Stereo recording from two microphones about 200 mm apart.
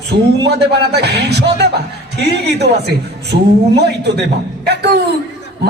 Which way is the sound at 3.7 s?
55° right (ahead or behind).